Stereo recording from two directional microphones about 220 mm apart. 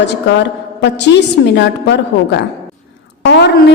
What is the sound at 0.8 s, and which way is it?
A woman's voice, 50° left (ahead or behind).